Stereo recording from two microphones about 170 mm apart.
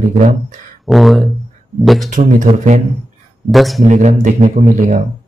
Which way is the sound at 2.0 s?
45° right (ahead or behind).